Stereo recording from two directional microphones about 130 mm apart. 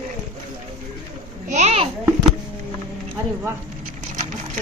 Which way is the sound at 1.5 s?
55° right (ahead or behind).